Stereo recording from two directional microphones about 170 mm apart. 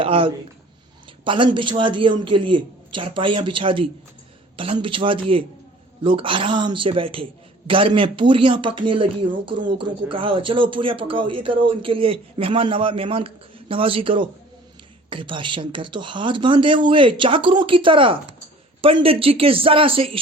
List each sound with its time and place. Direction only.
0.0 s a man's voice: 30° right (ahead or behind)